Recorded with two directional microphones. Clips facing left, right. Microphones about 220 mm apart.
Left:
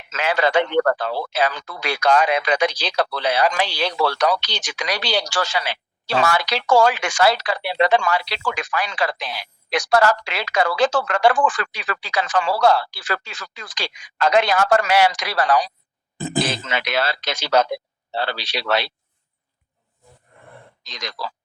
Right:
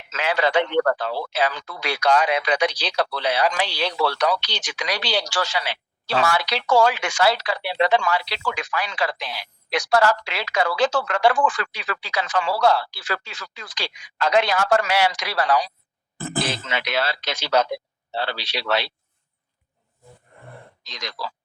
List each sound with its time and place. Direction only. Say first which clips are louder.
0.1 s a man's voice: left 2 dB; 45° left (ahead or behind)
16.1 s speech: left 4 dB; 15° left (ahead or behind)
16.6 s a man's voice: left 2 dB; 45° left (ahead or behind)
18.7 s a man's voice: left 2 dB; 45° left (ahead or behind)